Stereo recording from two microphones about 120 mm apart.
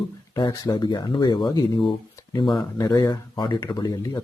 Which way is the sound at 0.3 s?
35° left (ahead or behind).